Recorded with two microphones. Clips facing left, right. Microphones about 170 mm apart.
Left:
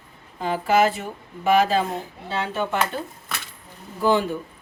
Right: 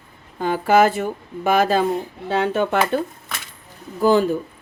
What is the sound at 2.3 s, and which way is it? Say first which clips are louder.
Speech: right 6 dB; 60° right (ahead or behind).